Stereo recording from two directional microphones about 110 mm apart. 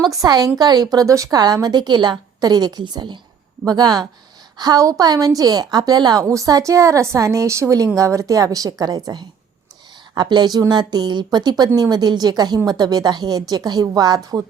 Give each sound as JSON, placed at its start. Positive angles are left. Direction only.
{"t": 0.0, "sound": "speech", "side_deg": -35}